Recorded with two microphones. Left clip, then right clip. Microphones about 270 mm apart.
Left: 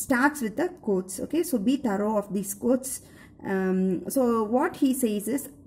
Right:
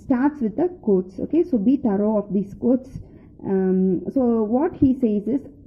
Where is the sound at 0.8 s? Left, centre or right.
Centre.